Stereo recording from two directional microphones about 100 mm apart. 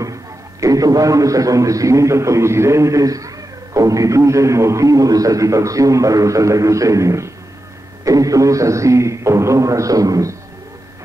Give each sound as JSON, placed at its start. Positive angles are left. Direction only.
{"t": 0.0, "sound": "a man's voice", "side_deg": -35}